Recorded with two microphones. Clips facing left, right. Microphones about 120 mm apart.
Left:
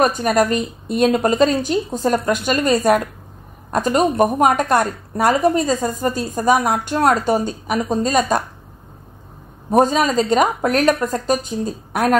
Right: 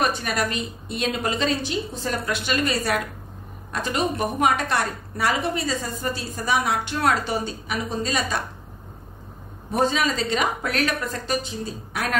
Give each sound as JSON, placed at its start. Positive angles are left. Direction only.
{"t": 0.0, "sound": "a woman's voice", "side_deg": 40}
{"t": 9.7, "sound": "a woman's voice", "side_deg": 45}